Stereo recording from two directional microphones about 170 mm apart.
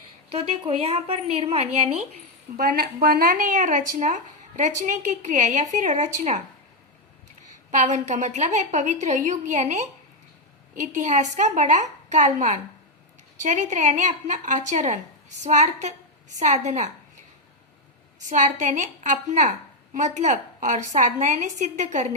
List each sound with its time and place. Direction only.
0.3 s a woman's voice: 35° right (ahead or behind)
2.6 s a woman's voice: 60° right (ahead or behind)
7.7 s a woman's voice: 45° right (ahead or behind)
18.3 s a woman's voice: 45° right (ahead or behind)